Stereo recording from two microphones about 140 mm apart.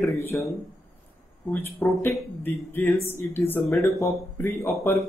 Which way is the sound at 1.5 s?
10° left (ahead or behind).